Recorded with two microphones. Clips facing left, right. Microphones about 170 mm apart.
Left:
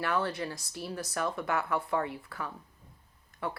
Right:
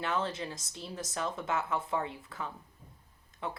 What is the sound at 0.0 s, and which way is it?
Speech, 20° right (ahead or behind).